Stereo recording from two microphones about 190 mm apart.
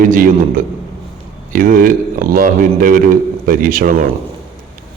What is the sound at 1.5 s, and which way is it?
A man's voice, 45° right (ahead or behind).